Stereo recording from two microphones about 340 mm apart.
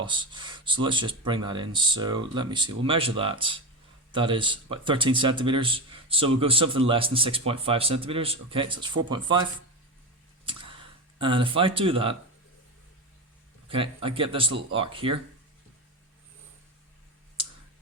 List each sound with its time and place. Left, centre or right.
0.0 s speech: centre
10.4 s a sound: centre
11.2 s speech: centre
13.7 s speech: centre